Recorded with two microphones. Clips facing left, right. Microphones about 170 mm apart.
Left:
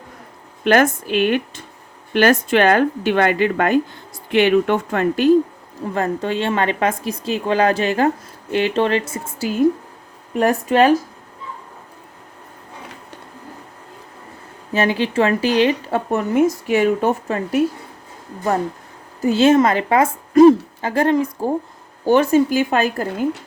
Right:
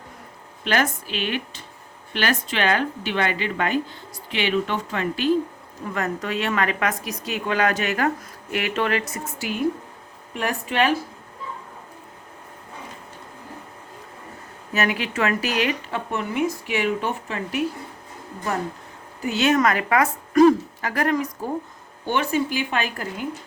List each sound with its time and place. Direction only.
0.6 s speech: 50° left (ahead or behind)
5.8 s a woman's voice: 30° left (ahead or behind)
14.7 s speech: 30° left (ahead or behind)
19.2 s a woman's voice: 30° left (ahead or behind)
22.0 s speech: 40° left (ahead or behind)